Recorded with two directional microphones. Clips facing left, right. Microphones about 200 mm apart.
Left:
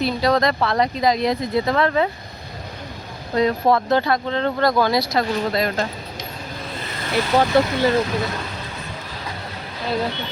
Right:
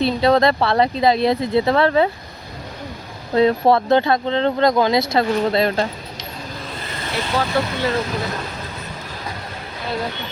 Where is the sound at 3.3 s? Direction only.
30° right (ahead or behind).